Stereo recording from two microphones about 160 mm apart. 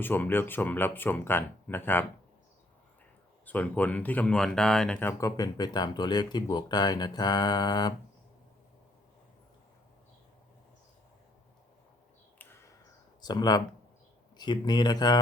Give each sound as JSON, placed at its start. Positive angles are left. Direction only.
{"t": 0.0, "sound": "speech", "side_deg": 10}
{"t": 3.4, "sound": "speech", "side_deg": 10}
{"t": 5.4, "sound": "speech", "side_deg": 25}
{"t": 13.2, "sound": "speech", "side_deg": 25}